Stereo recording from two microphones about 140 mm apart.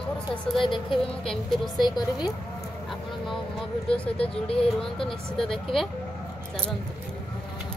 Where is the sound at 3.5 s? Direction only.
10° left (ahead or behind).